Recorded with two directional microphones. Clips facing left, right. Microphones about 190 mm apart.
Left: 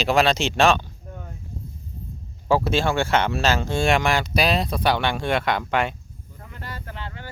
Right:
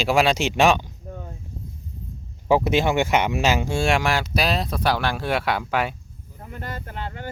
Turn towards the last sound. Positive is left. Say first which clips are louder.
# right 3 dB
turn(degrees=-45)  # may be behind; listen again after turning